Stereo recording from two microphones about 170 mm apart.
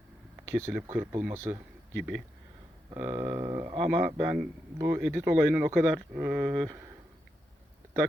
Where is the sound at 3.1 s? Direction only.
20° right (ahead or behind).